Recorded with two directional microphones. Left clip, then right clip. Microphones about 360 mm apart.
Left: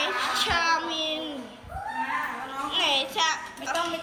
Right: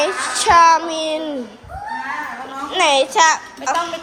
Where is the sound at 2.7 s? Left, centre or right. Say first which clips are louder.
Right 11 dB; centre.